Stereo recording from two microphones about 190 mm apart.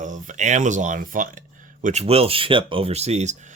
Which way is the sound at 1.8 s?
35° right (ahead or behind).